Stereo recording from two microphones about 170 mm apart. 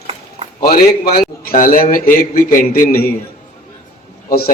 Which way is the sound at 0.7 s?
60° left (ahead or behind).